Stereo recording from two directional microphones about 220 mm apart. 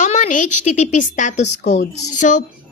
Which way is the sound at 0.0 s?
35° left (ahead or behind).